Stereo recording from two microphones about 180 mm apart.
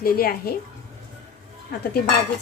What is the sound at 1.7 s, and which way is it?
Dishes, 55° left (ahead or behind).